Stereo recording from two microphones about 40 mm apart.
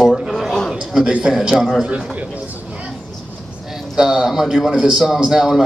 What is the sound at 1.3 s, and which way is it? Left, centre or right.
Speech, centre.